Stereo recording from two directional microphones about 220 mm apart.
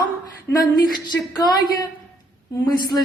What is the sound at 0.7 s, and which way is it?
Speech, 15° left (ahead or behind).